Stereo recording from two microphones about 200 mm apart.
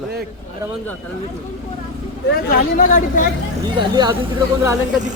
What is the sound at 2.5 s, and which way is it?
Speech, 45° left (ahead or behind).